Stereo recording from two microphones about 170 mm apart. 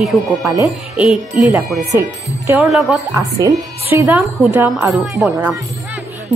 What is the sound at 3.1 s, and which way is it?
A woman's voice, 20° right (ahead or behind).